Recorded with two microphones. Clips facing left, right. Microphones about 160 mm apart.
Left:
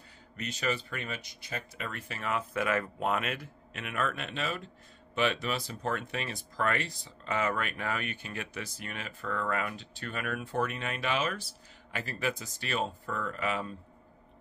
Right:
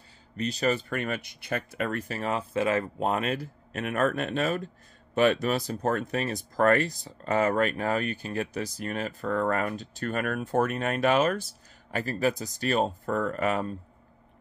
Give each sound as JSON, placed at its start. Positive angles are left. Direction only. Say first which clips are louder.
{"t": 0.4, "sound": "speech", "louder": "right 7 dB", "side_deg": -35}